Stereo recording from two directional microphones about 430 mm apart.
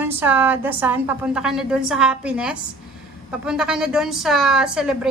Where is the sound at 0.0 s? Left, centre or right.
Centre.